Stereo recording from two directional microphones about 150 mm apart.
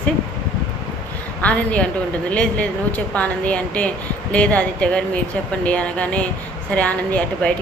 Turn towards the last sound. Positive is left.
turn(degrees=10)  # may be behind; listen again after turning